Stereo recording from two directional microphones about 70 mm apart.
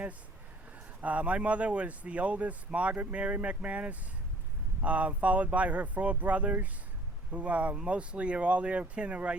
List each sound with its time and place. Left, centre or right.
1.0 s speech: centre